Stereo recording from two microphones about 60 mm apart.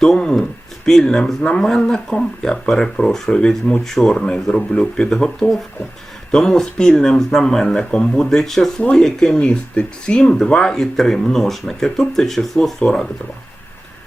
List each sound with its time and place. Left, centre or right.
0.0 s speech: centre
8.8 s speech: centre